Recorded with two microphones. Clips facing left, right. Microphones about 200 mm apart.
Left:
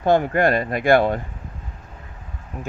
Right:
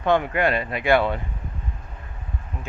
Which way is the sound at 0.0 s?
40° left (ahead or behind).